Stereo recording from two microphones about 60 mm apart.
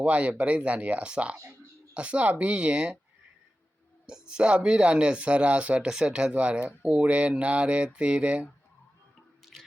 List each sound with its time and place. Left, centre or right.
0.0 s speech: right
4.0 s speech: centre
9.5 s drip: centre